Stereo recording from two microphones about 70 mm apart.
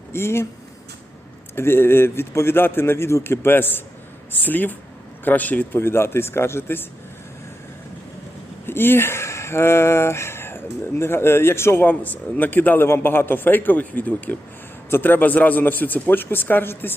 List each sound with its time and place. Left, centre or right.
0.1 s speech: left
1.5 s a man's voice: left
5.8 s speech: left
8.6 s a man's voice: left